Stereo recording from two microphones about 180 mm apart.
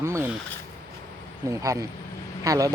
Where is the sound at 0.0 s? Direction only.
15° right (ahead or behind).